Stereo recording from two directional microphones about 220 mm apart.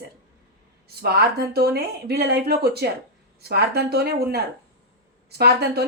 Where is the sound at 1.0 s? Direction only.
45° right (ahead or behind).